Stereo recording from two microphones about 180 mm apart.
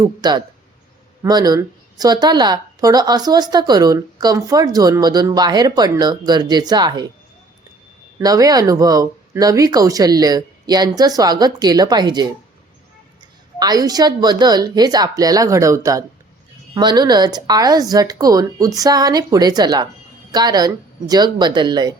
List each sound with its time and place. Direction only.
0.0 s speech: 25° right (ahead or behind)
8.2 s speech: 20° right (ahead or behind)
13.6 s speech: 20° right (ahead or behind)